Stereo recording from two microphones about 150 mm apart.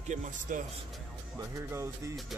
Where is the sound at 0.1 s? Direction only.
60° right (ahead or behind).